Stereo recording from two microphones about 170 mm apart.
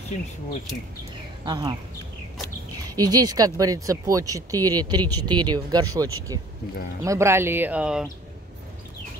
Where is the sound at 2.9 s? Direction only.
20° right (ahead or behind); by 8.0 s 5° right (ahead or behind).